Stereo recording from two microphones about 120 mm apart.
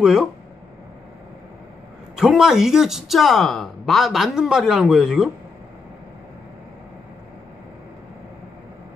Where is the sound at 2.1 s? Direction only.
5° right (ahead or behind).